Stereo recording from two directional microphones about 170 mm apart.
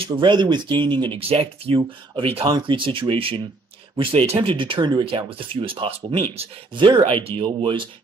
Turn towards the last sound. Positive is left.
turn(degrees=-30)  # may be behind; listen again after turning